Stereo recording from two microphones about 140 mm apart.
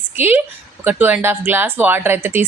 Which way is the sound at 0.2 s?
15° right (ahead or behind).